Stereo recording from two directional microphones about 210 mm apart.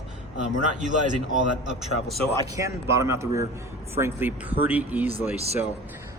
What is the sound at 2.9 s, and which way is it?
Speech, 15° right (ahead or behind).